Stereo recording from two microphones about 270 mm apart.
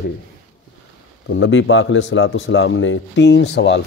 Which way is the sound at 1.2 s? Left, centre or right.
Left.